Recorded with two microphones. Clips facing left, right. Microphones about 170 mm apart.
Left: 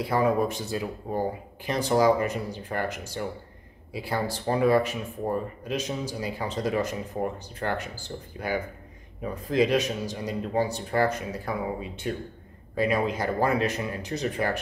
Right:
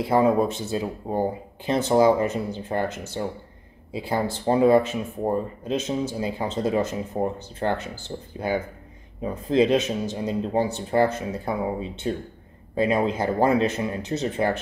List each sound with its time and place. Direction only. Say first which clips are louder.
0.1 s speech: right 4 dB; 25° right (ahead or behind)